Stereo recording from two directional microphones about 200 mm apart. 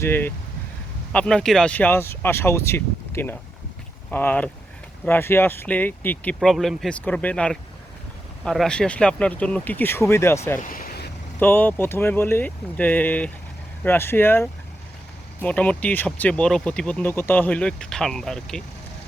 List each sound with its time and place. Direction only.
0.0 s speech: 10° left (ahead or behind)
10.6 s vehicle: 45° left (ahead or behind)
11.3 s speech: 10° left (ahead or behind)